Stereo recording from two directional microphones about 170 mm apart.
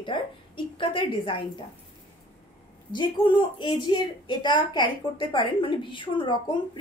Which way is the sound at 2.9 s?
25° left (ahead or behind).